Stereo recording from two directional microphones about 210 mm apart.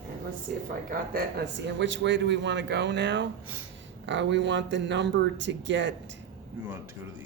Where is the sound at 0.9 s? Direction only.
45° right (ahead or behind).